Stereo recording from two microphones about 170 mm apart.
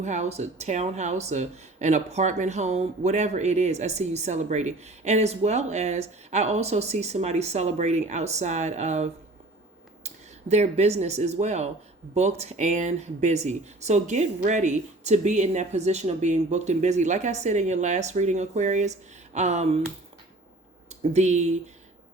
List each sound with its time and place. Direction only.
0.0 s speech: 45° right (ahead or behind)
10.5 s speech: 40° right (ahead or behind)
21.1 s speech: 40° right (ahead or behind)